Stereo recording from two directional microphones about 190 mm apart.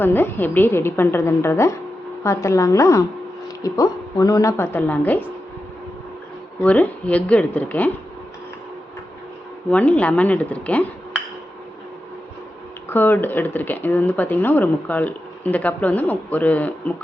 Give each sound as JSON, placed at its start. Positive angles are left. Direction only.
{"t": 0.0, "sound": "speech", "side_deg": 10}
{"t": 6.6, "sound": "speech", "side_deg": 10}
{"t": 9.6, "sound": "speech", "side_deg": 5}
{"t": 12.9, "sound": "speech", "side_deg": 10}